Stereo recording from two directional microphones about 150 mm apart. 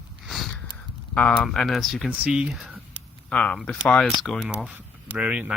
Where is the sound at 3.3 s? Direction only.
10° left (ahead or behind).